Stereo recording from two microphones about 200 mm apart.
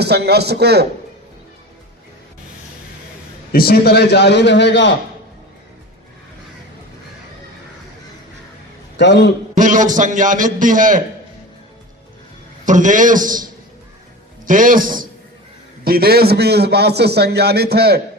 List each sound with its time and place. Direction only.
0.0 s a man's voice: 55° right (ahead or behind)
3.5 s a man's voice: 50° left (ahead or behind)
9.0 s a man's voice: 60° left (ahead or behind)
9.6 s a man's voice: 40° right (ahead or behind)
12.6 s a man's voice: 40° right (ahead or behind)